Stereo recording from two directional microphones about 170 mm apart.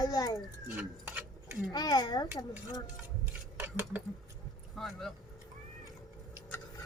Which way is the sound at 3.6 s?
10° right (ahead or behind).